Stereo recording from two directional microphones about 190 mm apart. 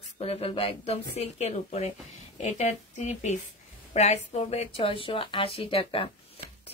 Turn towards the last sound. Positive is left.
turn(degrees=30)  # may be behind; listen again after turning